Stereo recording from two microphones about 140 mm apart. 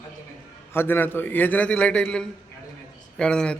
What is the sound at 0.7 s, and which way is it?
A man's voice, 15° left (ahead or behind).